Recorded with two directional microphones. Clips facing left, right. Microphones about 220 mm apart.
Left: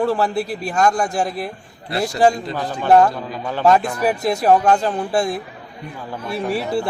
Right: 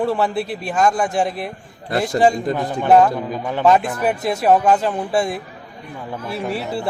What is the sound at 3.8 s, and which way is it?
A man's voice, centre (ahead or behind).